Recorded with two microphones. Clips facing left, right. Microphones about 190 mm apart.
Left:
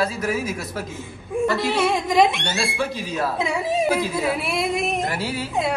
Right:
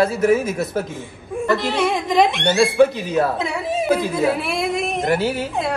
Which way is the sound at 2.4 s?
60° right (ahead or behind).